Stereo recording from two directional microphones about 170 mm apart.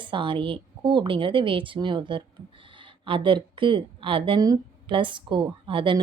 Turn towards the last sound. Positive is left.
turn(degrees=-30)  # may be behind; listen again after turning